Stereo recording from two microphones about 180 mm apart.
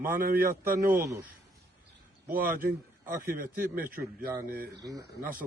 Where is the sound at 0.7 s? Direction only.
15° right (ahead or behind).